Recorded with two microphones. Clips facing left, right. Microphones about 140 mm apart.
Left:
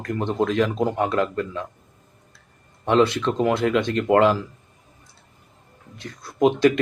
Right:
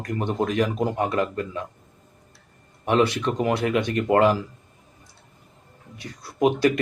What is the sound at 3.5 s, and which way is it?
Speech, 60° left (ahead or behind).